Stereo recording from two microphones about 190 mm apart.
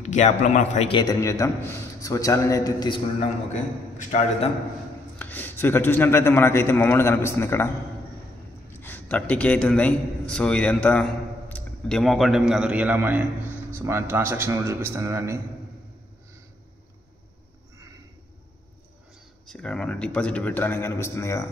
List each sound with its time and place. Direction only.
0.0 s a man's voice: 40° left (ahead or behind); by 3.0 s 20° left (ahead or behind)
4.0 s a man's voice: 40° left (ahead or behind)
5.2 s a man's voice: 10° left (ahead or behind)
8.7 s a man's voice: 10° left (ahead or behind); by 15.3 s 15° right (ahead or behind)
19.4 s a man's voice: 5° left (ahead or behind)